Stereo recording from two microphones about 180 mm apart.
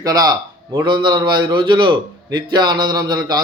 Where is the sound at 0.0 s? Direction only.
20° right (ahead or behind).